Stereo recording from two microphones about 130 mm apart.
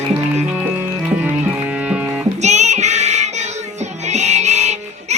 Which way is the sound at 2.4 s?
60° right (ahead or behind).